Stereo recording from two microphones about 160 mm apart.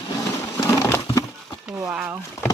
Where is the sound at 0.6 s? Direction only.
20° left (ahead or behind).